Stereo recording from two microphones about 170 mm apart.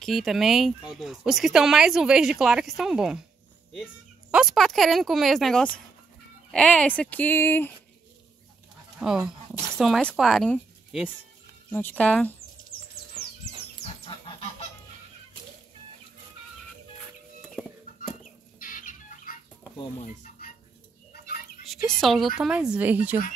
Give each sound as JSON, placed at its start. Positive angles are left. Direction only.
{"t": 0.0, "sound": "speech", "side_deg": 0}
{"t": 9.0, "sound": "speech", "side_deg": -5}
{"t": 14.0, "sound": "goose", "side_deg": 35}
{"t": 18.6, "sound": "chicken", "side_deg": 55}
{"t": 20.2, "sound": "a sound", "side_deg": 55}
{"t": 21.6, "sound": "a woman's voice", "side_deg": 0}